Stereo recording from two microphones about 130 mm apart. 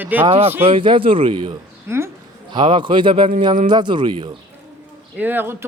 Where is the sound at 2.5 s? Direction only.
40° right (ahead or behind).